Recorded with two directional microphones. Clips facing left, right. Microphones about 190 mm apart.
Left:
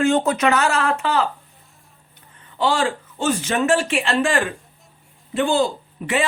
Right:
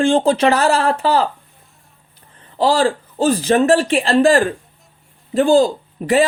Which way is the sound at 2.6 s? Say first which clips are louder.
Right 5 dB; 35° right (ahead or behind).